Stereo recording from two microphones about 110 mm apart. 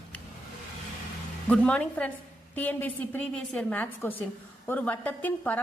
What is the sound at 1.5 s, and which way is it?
A woman's voice, 10° left (ahead or behind).